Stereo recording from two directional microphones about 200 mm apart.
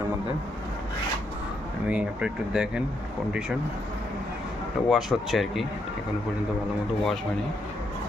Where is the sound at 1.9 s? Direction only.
5° right (ahead or behind).